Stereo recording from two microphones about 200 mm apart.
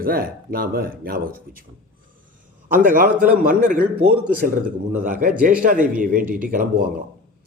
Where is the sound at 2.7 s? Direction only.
45° right (ahead or behind).